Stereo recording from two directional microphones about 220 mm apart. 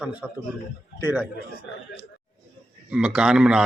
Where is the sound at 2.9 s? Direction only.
5° right (ahead or behind).